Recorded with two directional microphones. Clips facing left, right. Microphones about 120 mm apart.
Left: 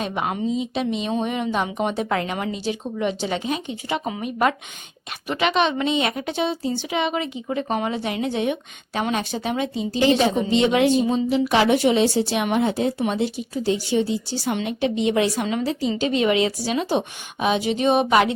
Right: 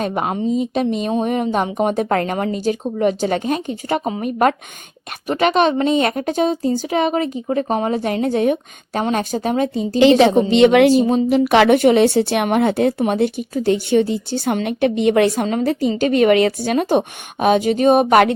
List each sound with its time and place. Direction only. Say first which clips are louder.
0.0 s speech: right 4 dB; 40° right (ahead or behind)
10.0 s a woman's voice: right 7 dB; 85° right; by 10.9 s 70° right (ahead or behind)
11.0 s speech: right 5 dB; 55° right (ahead or behind)